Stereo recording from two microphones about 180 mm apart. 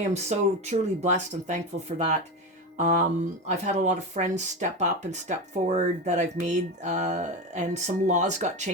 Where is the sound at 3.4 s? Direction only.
40° right (ahead or behind).